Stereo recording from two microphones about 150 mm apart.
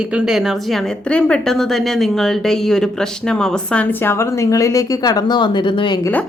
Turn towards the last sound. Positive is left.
turn(degrees=10)  # may be behind; listen again after turning